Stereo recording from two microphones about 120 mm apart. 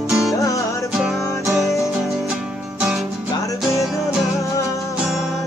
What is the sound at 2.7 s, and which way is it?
Music, 10° right (ahead or behind).